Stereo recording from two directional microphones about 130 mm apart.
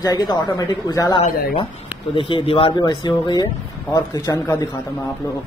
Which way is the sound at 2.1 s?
45° left (ahead or behind).